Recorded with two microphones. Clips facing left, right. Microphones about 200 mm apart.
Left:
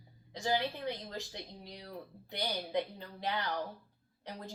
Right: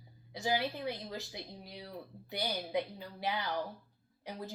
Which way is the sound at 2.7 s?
5° right (ahead or behind).